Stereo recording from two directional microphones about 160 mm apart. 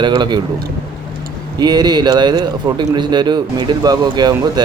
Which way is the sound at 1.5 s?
25° right (ahead or behind).